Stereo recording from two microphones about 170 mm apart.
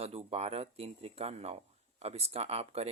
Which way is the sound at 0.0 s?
35° right (ahead or behind).